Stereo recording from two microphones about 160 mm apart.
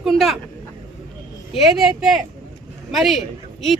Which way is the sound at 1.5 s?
Centre (ahead or behind).